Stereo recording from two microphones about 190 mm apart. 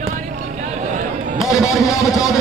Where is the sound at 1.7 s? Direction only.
20° left (ahead or behind).